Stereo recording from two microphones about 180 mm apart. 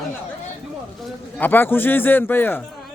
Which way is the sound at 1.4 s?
10° left (ahead or behind).